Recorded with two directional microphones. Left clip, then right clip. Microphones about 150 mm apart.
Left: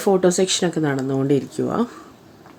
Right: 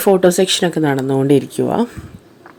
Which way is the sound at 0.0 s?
20° right (ahead or behind).